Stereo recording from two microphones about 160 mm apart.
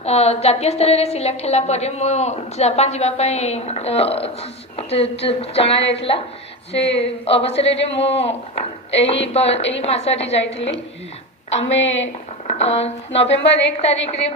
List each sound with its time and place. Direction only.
0.0 s a woman's voice: 40° left (ahead or behind)
12.5 s a woman's voice: 40° left (ahead or behind)
13.3 s a woman's voice: 90° left
13.8 s a woman's voice: 40° left (ahead or behind)